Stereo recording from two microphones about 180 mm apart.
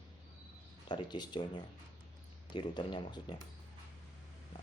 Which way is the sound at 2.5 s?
25° left (ahead or behind).